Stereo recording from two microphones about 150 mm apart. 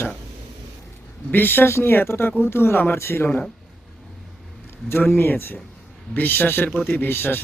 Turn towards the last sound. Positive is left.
turn(degrees=15)  # may be behind; listen again after turning